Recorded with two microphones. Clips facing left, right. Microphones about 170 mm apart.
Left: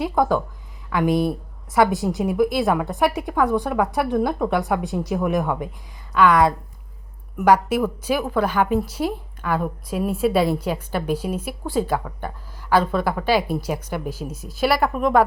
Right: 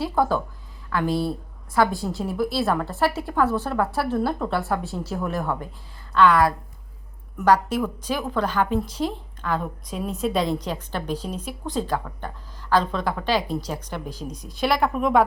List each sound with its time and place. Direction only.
0.0 s a woman's voice: 15° left (ahead or behind)